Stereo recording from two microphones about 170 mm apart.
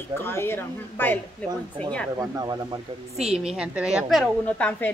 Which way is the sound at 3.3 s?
5° right (ahead or behind).